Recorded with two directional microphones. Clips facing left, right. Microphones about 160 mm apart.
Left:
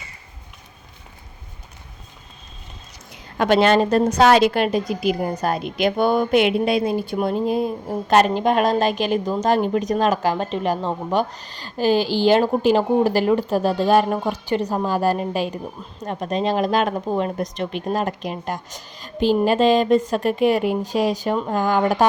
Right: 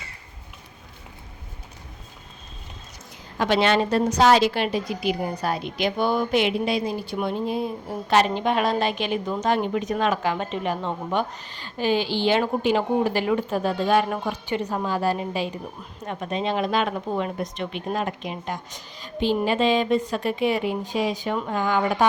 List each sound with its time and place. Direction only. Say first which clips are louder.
3.3 s a woman's voice: left 5 dB; 50° left (ahead or behind)